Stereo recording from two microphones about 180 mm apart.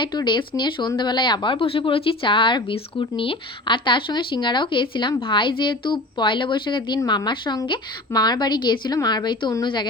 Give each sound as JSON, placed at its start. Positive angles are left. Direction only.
{"t": 0.0, "sound": "speech", "side_deg": 25}